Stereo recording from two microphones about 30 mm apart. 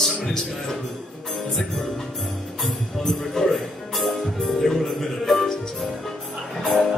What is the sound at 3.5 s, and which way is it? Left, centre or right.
A man's voice, centre.